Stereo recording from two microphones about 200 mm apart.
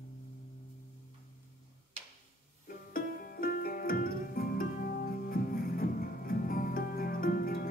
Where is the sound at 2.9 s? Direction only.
45° left (ahead or behind).